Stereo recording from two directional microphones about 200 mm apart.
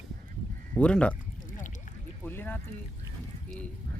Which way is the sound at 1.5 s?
40° left (ahead or behind).